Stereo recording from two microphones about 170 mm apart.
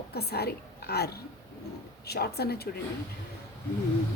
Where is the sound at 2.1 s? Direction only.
70° left (ahead or behind).